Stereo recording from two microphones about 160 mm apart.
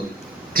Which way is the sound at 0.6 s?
65° right (ahead or behind).